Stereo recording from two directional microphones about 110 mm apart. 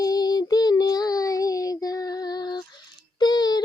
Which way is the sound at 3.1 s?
40° left (ahead or behind).